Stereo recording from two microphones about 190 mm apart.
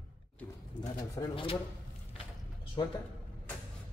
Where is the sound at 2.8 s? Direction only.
20° left (ahead or behind).